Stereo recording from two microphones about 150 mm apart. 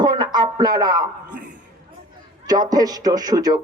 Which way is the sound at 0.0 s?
30° right (ahead or behind).